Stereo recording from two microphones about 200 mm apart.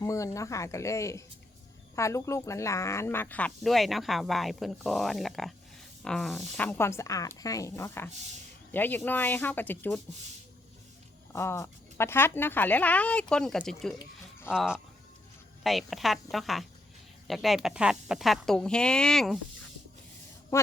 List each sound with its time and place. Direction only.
0.0 s speech: 15° left (ahead or behind)
11.3 s speech: 15° left (ahead or behind)
20.5 s speech: 15° left (ahead or behind)